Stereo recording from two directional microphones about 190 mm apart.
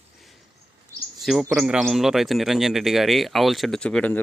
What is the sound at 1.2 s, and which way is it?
Speech, centre (ahead or behind).